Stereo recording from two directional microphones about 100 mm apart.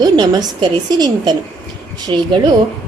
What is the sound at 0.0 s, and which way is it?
A woman's voice, 45° right (ahead or behind).